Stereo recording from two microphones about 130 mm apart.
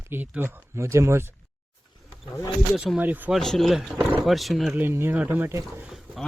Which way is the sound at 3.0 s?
15° right (ahead or behind).